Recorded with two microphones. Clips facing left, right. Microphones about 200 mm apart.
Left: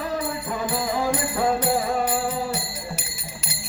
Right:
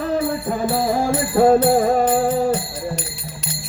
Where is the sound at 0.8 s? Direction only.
45° right (ahead or behind).